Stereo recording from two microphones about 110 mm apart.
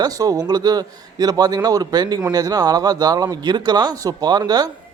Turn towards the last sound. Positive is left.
turn(degrees=-35)  # may be behind; listen again after turning